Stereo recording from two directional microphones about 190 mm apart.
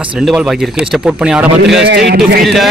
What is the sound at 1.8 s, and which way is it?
Speech, 55° right (ahead or behind).